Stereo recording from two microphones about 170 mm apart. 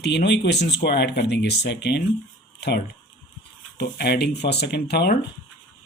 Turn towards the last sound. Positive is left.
turn(degrees=75)  # may be behind; listen again after turning